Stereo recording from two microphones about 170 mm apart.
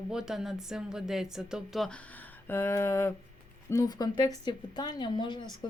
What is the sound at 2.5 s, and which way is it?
A woman's voice, 15° left (ahead or behind).